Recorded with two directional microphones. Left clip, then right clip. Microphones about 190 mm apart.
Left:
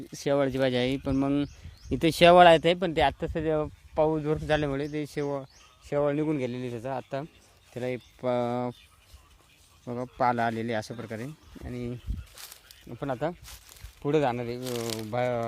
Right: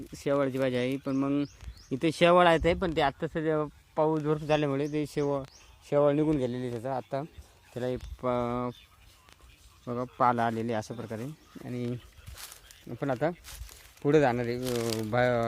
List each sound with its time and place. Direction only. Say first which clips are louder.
0.1 s speech: left 2 dB; 25° left (ahead or behind); by 8.0 s 5° left (ahead or behind)
8.2 s speech: left 2 dB; 15° left (ahead or behind)
9.8 s speech: even; 10° left (ahead or behind)
11.5 s a sound: right 2 dB; 5° right (ahead or behind)
13.0 s speech: right 1 dB; 10° right (ahead or behind)
14.6 s speech: right 2 dB; centre (ahead or behind)
14.9 s speech: right 3 dB; 20° right (ahead or behind)